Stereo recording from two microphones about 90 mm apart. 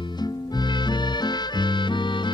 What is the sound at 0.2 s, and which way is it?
Music, 55° left (ahead or behind).